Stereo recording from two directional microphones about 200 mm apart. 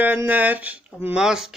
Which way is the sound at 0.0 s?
10° right (ahead or behind).